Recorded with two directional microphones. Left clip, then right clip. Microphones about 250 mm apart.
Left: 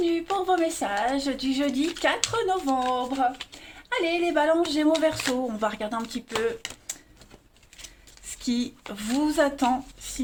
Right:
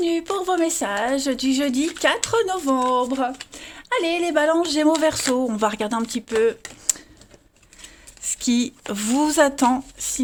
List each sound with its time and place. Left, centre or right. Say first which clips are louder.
0.0 s speech: right 3 dB; right
8.3 s speech: right 7 dB; right